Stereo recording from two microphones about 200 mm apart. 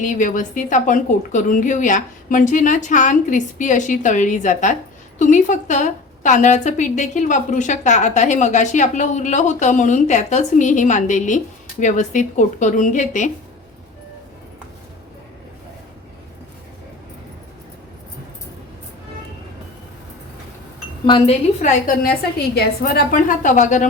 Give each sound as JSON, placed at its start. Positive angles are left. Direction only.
{"t": 0.0, "sound": "a woman's voice", "side_deg": 40}
{"t": 21.1, "sound": "wind chime", "side_deg": 25}
{"t": 22.5, "sound": "a woman's voice", "side_deg": 50}